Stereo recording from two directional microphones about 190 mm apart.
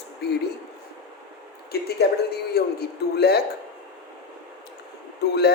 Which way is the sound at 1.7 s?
55° left (ahead or behind).